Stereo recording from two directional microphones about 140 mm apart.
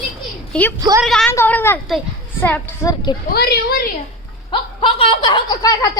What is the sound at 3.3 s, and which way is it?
Speech, 90° left.